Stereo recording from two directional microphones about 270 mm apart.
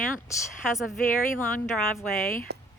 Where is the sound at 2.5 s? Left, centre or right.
Right.